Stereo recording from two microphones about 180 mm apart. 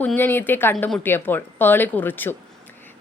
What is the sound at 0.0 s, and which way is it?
A woman's voice, 10° left (ahead or behind).